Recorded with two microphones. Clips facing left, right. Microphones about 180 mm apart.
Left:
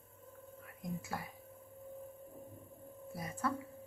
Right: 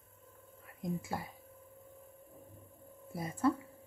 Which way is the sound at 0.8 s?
25° right (ahead or behind).